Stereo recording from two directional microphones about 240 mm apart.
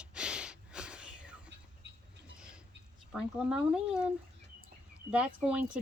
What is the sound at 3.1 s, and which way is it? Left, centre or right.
Speech, centre.